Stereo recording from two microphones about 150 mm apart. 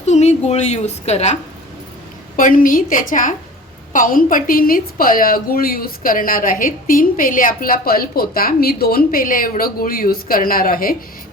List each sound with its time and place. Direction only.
0.0 s a woman's voice: 50° left (ahead or behind)
2.3 s a woman's voice: 65° left (ahead or behind)